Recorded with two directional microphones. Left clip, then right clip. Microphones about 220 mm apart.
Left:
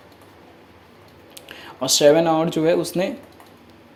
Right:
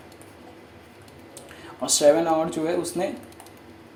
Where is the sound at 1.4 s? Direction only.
40° left (ahead or behind).